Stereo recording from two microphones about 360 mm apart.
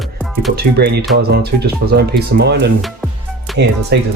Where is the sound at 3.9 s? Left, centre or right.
Right.